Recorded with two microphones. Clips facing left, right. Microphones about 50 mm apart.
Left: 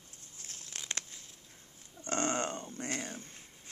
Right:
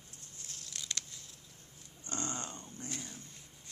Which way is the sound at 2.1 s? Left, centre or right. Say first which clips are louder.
Left 8 dB; left.